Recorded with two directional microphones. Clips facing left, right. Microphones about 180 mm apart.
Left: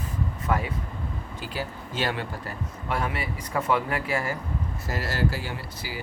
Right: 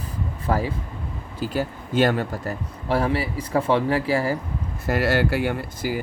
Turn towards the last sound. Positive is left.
turn(degrees=-50)  # may be behind; listen again after turning